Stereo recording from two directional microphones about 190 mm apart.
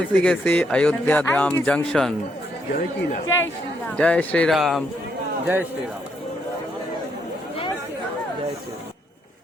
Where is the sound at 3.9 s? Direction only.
5° left (ahead or behind).